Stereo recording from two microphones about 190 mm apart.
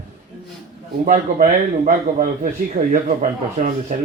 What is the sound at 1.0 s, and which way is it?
A man's voice, 45° right (ahead or behind).